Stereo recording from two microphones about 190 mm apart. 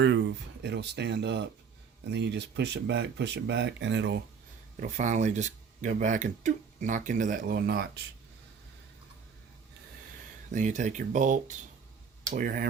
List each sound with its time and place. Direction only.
0.0 s speech: 75° right (ahead or behind)
4.8 s speech: 40° right (ahead or behind); by 7.9 s 55° right (ahead or behind)
10.5 s speech: 40° right (ahead or behind)